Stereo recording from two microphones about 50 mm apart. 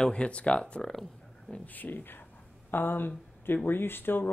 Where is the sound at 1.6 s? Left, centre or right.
Left.